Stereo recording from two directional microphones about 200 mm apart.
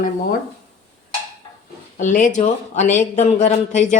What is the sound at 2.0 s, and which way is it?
Speech, 40° left (ahead or behind).